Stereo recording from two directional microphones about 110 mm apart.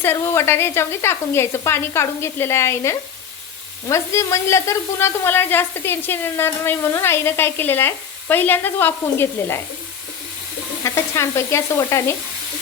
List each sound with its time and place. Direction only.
0.0 s a woman's voice: 20° left (ahead or behind)
10.8 s a woman's voice: 25° left (ahead or behind)